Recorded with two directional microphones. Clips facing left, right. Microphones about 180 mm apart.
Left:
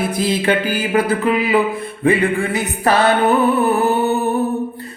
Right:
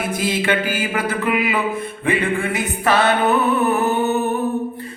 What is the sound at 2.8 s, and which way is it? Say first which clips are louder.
Mantra: left 2 dB; 40° left (ahead or behind).